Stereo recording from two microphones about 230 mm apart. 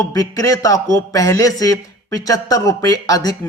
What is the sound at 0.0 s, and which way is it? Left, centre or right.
Speech, centre.